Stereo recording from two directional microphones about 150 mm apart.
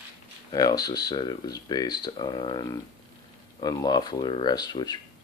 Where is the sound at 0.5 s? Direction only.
25° left (ahead or behind).